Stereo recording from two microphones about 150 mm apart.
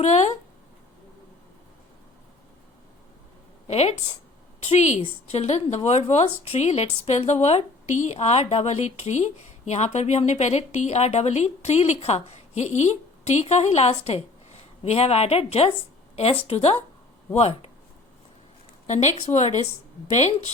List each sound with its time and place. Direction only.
0.0 s speech: 50° left (ahead or behind)
3.7 s a woman's voice: 45° left (ahead or behind)
18.9 s speech: 50° left (ahead or behind)